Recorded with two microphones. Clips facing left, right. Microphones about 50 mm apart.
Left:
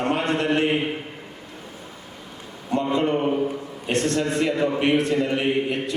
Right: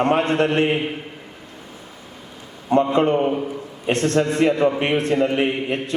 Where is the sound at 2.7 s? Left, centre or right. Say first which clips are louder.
Right 5 dB; right.